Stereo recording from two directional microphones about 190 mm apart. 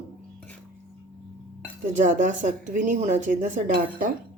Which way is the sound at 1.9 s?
40° right (ahead or behind).